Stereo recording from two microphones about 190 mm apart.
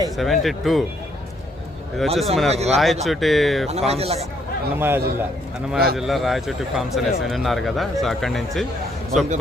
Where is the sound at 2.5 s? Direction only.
35° right (ahead or behind).